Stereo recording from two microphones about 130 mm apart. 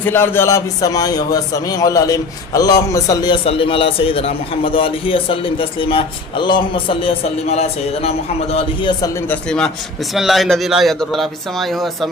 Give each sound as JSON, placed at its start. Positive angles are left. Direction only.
{"t": 0.0, "sound": "a man's voice", "side_deg": 15}
{"t": 3.4, "sound": "a man's voice", "side_deg": 45}
{"t": 8.5, "sound": "a man's voice", "side_deg": 40}
{"t": 9.3, "sound": "speech", "side_deg": 5}